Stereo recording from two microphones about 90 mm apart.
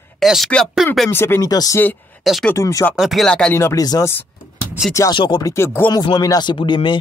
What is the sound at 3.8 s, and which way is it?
Speech, 45° left (ahead or behind).